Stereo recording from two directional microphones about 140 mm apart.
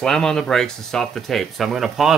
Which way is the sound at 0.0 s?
5° left (ahead or behind).